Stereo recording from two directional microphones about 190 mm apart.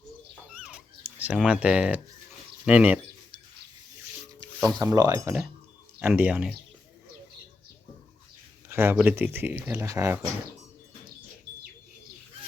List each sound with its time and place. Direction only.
0.5 s dog: 5° right (ahead or behind)
1.2 s speech: 5° right (ahead or behind)
4.8 s speech: 15° right (ahead or behind)
8.7 s speech: 10° right (ahead or behind)